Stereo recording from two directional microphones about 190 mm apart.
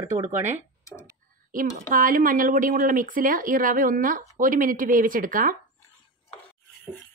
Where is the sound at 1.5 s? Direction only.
45° right (ahead or behind).